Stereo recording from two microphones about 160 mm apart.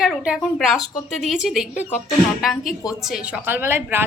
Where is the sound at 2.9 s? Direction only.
5° right (ahead or behind).